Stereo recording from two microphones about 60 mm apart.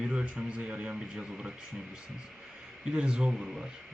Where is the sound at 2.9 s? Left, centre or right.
Centre.